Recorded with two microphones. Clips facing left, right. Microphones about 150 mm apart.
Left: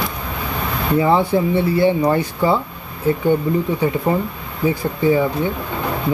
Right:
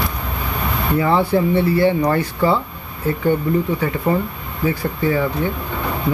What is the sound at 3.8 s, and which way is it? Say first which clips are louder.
Speech: left 1 dB; 15° left (ahead or behind).